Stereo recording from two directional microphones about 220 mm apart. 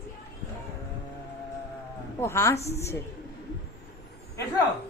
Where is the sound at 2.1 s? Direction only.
10° left (ahead or behind).